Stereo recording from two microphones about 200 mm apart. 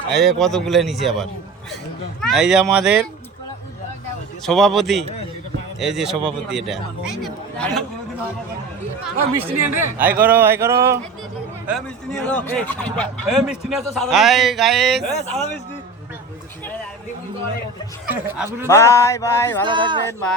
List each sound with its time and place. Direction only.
0.2 s a man's voice: centre (ahead or behind)
4.4 s a man's voice: centre (ahead or behind)
9.6 s a man's voice: 10° right (ahead or behind)
12.3 s a man's voice: 5° left (ahead or behind)
18.0 s speech: 5° right (ahead or behind)
18.7 s a sound: 15° left (ahead or behind)
19.6 s speech: 25° right (ahead or behind)